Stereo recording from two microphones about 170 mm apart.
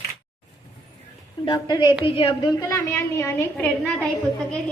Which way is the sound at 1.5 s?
25° left (ahead or behind).